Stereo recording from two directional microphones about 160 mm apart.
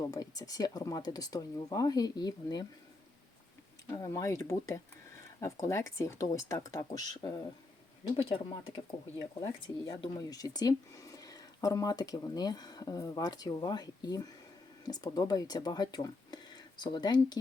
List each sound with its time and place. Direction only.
0.1 s speech: 25° left (ahead or behind)
3.9 s speech: 20° left (ahead or behind)
8.2 s speech: 35° left (ahead or behind)
9.4 s speech: 20° left (ahead or behind)